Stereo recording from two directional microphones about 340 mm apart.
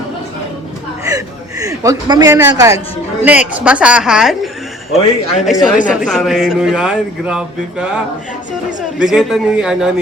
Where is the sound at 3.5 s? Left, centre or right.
Centre.